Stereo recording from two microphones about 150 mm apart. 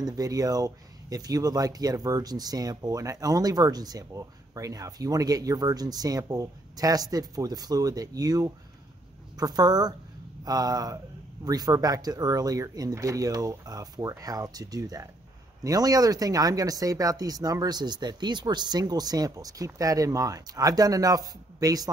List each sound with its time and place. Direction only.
0.0 s speech: 25° right (ahead or behind)